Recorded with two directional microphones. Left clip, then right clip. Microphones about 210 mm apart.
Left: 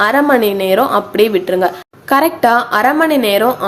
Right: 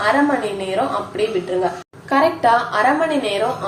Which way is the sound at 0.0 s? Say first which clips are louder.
Left 6 dB; 55° left (ahead or behind).